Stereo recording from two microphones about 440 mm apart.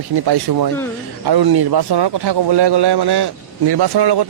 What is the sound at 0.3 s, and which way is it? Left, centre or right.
Speech, right.